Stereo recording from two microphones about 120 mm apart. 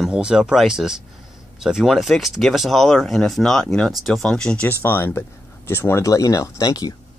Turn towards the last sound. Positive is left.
turn(degrees=35)  # may be behind; listen again after turning